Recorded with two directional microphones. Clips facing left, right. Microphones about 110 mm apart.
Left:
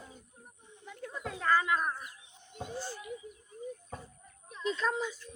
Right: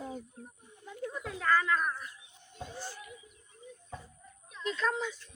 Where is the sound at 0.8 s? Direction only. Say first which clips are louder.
Right 4 dB; 15° right (ahead or behind).